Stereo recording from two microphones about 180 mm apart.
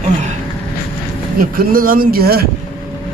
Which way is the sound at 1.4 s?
50° right (ahead or behind).